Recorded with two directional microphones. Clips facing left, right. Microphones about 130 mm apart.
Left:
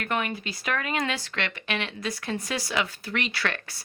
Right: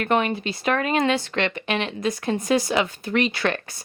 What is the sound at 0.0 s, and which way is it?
Speech, 25° right (ahead or behind).